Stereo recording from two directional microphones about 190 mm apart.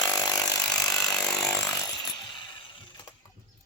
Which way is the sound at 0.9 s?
5° left (ahead or behind).